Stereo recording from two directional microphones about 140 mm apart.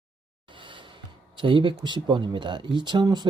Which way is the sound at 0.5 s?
35° right (ahead or behind).